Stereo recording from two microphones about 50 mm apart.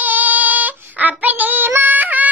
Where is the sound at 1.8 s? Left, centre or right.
Right.